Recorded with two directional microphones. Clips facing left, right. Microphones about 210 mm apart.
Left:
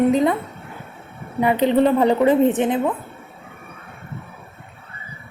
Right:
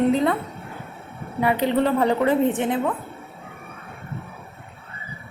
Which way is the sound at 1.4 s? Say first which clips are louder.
Left 4 dB; 20° left (ahead or behind).